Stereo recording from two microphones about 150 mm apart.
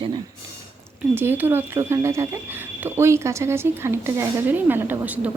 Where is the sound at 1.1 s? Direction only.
15° right (ahead or behind).